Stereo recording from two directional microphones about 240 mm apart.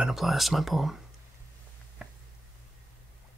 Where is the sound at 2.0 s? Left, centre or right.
Centre.